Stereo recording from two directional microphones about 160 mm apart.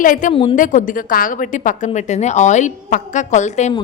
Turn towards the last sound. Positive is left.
turn(degrees=45)  # may be behind; listen again after turning